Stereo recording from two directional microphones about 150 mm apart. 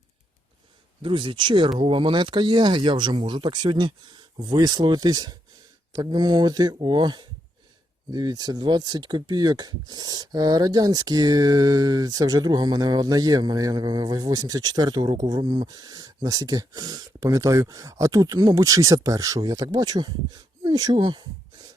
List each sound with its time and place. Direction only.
1.0 s speech: 35° right (ahead or behind)